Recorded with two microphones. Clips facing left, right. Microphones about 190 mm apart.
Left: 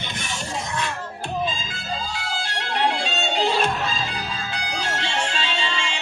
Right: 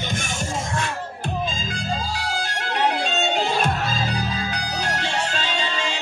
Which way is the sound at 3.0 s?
45° right (ahead or behind).